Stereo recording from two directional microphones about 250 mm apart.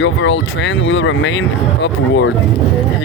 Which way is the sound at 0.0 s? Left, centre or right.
Left.